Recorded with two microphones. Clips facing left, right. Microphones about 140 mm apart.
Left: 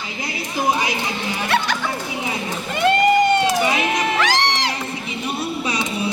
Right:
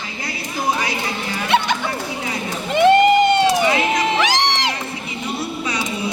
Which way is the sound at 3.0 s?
25° right (ahead or behind).